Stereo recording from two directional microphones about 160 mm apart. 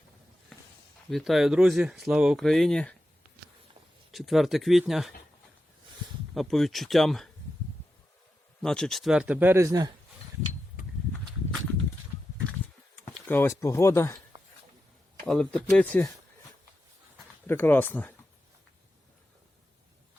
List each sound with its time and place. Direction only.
1.1 s speech: centre (ahead or behind)
4.1 s speech: centre (ahead or behind)
6.3 s speech: centre (ahead or behind)
8.6 s speech: 5° left (ahead or behind); by 9.9 s 20° right (ahead or behind)
13.2 s speech: 15° left (ahead or behind)
15.3 s speech: 5° left (ahead or behind)
17.4 s speech: 15° left (ahead or behind)